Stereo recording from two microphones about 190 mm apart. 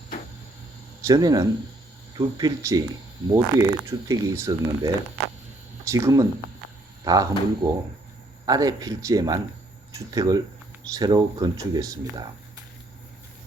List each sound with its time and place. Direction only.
1.0 s speech: 20° right (ahead or behind)